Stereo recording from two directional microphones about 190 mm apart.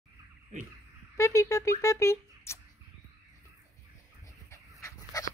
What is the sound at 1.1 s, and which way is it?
Speech, 15° left (ahead or behind).